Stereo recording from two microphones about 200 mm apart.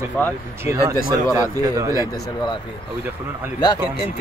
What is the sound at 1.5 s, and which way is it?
Speech, 15° right (ahead or behind).